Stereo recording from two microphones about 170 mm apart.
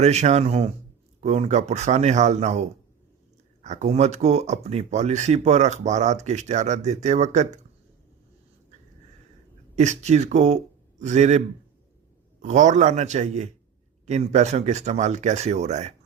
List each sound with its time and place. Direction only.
0.0 s speech: 40° right (ahead or behind)
9.7 s speech: 45° right (ahead or behind)